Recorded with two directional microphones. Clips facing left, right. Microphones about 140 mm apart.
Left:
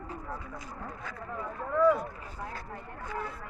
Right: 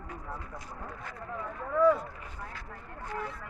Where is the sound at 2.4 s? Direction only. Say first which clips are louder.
Left 5 dB; 40° left (ahead or behind).